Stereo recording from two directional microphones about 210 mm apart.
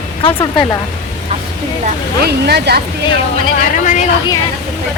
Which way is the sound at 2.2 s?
50° right (ahead or behind).